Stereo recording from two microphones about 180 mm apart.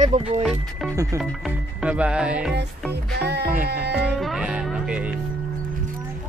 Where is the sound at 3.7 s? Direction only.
65° right (ahead or behind).